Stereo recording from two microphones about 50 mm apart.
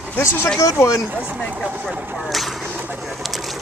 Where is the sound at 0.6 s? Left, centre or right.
Left.